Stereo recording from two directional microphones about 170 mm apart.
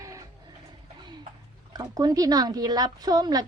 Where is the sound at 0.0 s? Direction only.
20° right (ahead or behind).